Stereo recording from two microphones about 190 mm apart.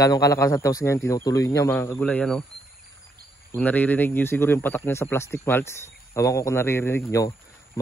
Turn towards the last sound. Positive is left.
turn(degrees=15)  # may be behind; listen again after turning